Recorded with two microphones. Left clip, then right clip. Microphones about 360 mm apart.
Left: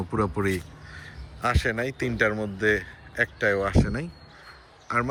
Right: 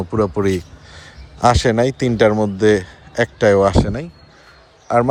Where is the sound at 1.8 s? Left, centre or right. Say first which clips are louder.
Right 9 dB; centre.